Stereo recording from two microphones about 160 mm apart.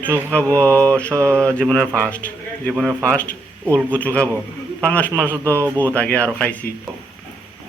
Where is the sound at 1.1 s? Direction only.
15° right (ahead or behind).